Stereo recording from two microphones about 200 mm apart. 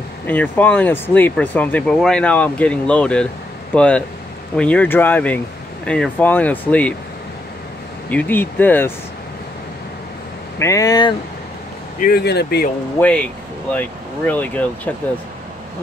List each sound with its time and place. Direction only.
0.3 s speech: 10° left (ahead or behind)
8.1 s speech: 10° left (ahead or behind)
10.6 s speech: 15° left (ahead or behind)
12.0 s speech: 50° left (ahead or behind)
13.0 s speech: 5° left (ahead or behind)